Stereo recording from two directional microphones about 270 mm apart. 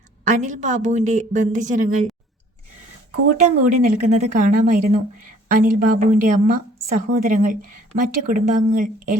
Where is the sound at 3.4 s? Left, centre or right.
Right.